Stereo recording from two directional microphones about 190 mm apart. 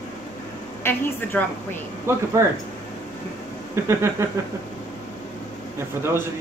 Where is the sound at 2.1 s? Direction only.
15° right (ahead or behind).